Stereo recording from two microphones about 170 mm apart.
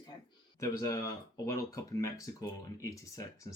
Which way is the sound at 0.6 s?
20° left (ahead or behind).